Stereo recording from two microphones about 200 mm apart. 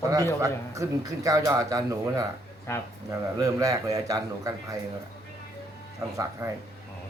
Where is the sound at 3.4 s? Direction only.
15° right (ahead or behind).